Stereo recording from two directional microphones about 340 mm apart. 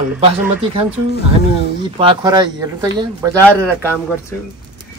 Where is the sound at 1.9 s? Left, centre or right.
Centre.